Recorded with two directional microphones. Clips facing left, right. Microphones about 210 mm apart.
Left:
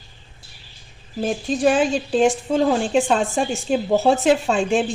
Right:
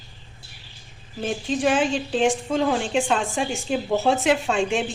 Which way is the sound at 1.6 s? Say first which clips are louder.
Left 4 dB; 40° left (ahead or behind).